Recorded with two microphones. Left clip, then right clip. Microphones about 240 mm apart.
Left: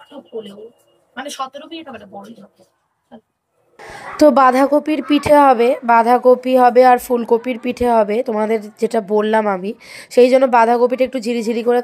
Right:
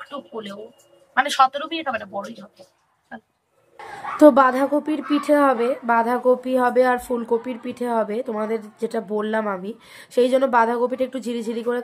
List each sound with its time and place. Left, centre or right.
1.5 s speech: centre
4.2 s a woman's voice: left